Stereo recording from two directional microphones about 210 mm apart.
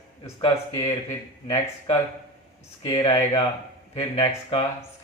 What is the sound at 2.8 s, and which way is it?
Speech, 20° left (ahead or behind).